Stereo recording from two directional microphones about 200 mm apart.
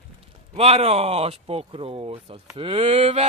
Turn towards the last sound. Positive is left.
turn(degrees=-30)  # may be behind; listen again after turning